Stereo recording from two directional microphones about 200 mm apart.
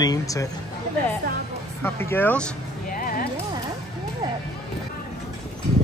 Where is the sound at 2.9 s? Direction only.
45° left (ahead or behind).